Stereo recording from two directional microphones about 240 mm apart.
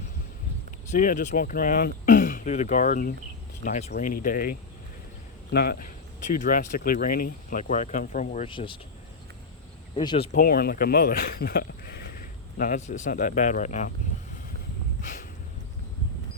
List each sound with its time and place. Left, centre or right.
0.9 s speech: left
9.9 s speech: left
10.3 s speech: left
15.0 s a sound: left